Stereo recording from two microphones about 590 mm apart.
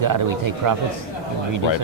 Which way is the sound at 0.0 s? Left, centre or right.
Right.